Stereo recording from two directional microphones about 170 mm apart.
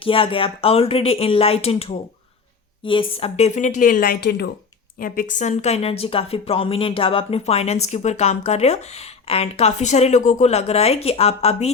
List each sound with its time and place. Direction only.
0.0 s a woman's voice: 30° left (ahead or behind); by 4.4 s 70° left (ahead or behind)
4.9 s speech: 55° left (ahead or behind); by 11.7 s 35° left (ahead or behind)